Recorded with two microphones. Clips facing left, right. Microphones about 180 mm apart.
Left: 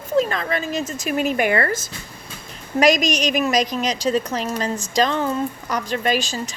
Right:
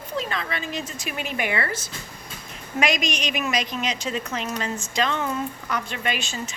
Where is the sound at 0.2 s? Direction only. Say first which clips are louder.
Left 9 dB; 45° left (ahead or behind).